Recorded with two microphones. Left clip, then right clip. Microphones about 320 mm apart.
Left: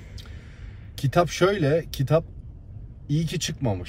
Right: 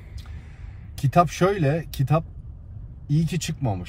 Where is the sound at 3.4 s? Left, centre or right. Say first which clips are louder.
Left 2 dB; centre.